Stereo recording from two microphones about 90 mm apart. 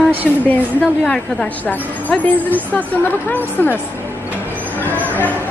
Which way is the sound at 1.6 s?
20° left (ahead or behind).